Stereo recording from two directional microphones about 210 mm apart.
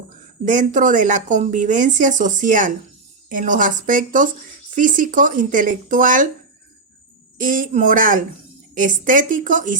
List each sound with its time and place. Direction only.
0.4 s speech: 40° right (ahead or behind)
7.3 s speech: 40° right (ahead or behind)